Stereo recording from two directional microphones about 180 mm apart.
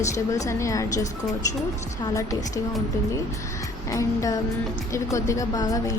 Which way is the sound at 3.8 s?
20° left (ahead or behind).